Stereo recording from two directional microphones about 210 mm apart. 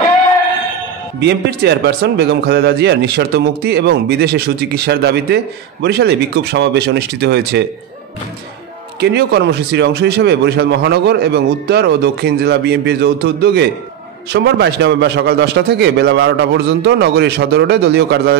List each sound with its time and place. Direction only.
1.2 s a man's voice: 50° right (ahead or behind)
9.0 s a man's voice: 55° right (ahead or behind)